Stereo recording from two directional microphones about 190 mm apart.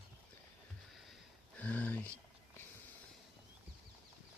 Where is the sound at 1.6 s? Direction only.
10° left (ahead or behind).